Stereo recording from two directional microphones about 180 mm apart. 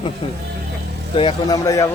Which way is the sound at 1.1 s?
30° left (ahead or behind).